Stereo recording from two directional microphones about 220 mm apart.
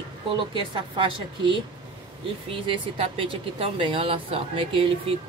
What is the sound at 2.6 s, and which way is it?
Speech, 25° right (ahead or behind).